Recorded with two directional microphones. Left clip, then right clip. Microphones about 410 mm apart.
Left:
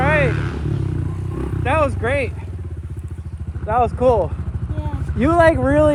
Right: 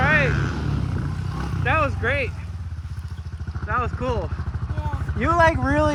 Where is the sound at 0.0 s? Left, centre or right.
Centre.